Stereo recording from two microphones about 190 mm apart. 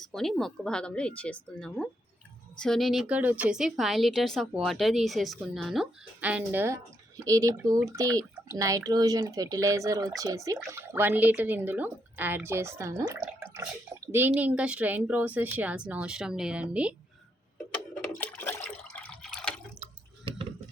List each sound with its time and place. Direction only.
0.0 s a woman's voice: centre (ahead or behind); by 13.1 s 15° right (ahead or behind)
13.1 s drip: 10° right (ahead or behind)
14.1 s speech: 10° right (ahead or behind)
18.1 s water: 10° left (ahead or behind)